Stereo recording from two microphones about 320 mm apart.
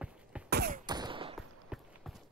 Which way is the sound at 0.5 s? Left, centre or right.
Right.